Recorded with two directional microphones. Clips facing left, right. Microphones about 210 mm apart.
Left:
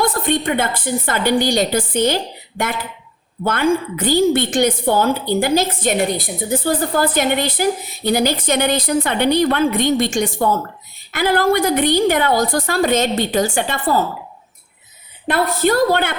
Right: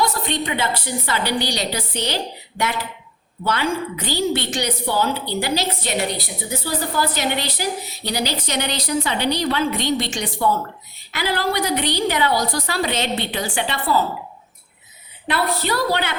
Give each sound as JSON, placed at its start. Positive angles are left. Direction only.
{"t": 0.0, "sound": "a woman's voice", "side_deg": 50}
{"t": 15.3, "sound": "a woman's voice", "side_deg": 50}